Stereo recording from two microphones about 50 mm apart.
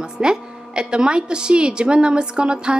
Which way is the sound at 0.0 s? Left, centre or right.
Centre.